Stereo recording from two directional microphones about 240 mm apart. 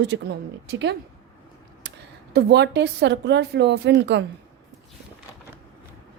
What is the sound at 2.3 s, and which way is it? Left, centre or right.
A woman's voice, right.